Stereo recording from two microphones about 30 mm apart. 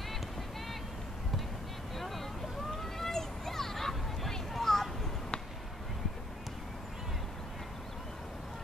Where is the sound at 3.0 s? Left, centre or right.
Centre.